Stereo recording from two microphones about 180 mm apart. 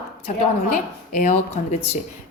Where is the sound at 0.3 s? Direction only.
45° left (ahead or behind).